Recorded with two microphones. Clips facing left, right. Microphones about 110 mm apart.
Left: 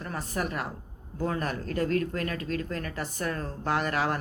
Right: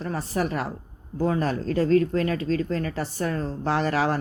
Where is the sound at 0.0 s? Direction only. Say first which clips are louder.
Right 6 dB; 30° right (ahead or behind).